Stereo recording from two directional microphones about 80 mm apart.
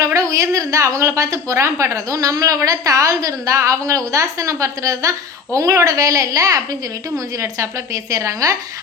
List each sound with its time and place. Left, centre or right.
0.0 s a woman's voice: right